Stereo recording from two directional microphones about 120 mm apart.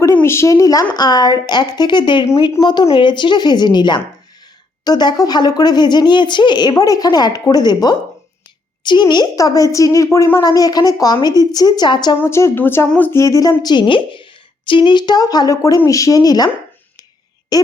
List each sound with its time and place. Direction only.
0.0 s a woman's voice: 20° left (ahead or behind)
10.4 s speech: 30° left (ahead or behind)
12.2 s speech: 20° left (ahead or behind)
17.5 s speech: 30° left (ahead or behind)